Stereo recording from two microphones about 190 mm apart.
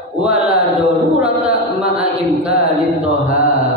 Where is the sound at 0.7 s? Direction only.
5° right (ahead or behind).